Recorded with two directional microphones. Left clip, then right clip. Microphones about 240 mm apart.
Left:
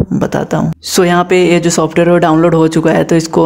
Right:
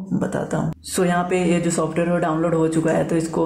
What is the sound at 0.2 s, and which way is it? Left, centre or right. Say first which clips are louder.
Speech: left 8 dB; left.